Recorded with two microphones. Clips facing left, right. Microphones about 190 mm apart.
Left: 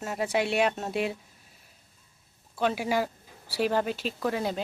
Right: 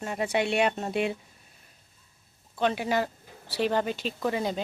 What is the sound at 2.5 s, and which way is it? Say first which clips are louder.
A woman's voice: even; 5° left (ahead or behind).